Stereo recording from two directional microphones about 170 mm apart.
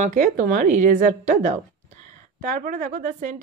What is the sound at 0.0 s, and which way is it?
A woman's voice, 50° right (ahead or behind).